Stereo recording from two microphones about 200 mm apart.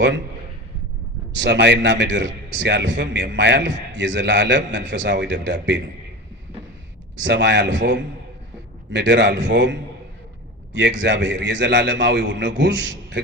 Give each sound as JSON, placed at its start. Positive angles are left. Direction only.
{"t": 1.4, "sound": "a man's voice", "side_deg": -60}
{"t": 7.2, "sound": "a man's voice", "side_deg": -60}
{"t": 10.8, "sound": "a man's voice", "side_deg": -60}